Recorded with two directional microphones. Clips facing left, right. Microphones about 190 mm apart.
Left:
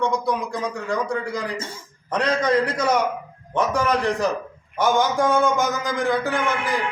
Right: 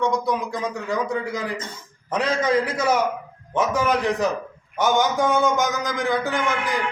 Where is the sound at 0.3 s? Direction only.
Centre (ahead or behind).